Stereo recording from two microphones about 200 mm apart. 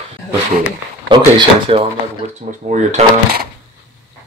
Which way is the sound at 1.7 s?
30° right (ahead or behind).